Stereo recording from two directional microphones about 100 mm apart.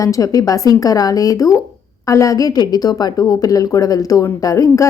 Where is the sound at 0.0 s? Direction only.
35° left (ahead or behind).